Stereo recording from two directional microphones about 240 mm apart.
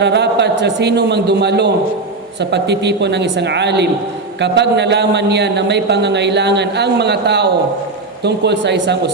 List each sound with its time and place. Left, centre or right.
0.0 s a man's voice: right